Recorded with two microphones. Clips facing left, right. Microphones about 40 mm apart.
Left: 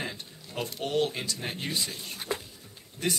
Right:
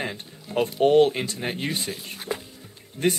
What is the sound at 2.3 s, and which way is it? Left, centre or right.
Music, centre.